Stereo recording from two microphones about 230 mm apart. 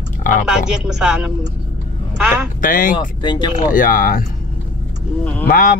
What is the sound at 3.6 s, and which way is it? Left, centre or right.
Speech, left.